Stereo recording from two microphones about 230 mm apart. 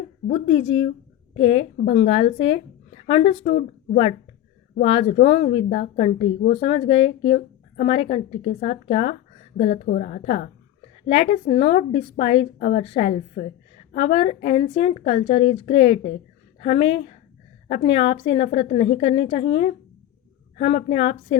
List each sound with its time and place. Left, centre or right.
0.3 s a woman's voice: left
4.7 s a woman's voice: left
6.2 s a woman's voice: left
6.6 s a woman's voice: left